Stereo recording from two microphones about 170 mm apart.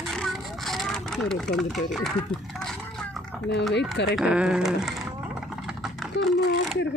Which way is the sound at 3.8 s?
90° left.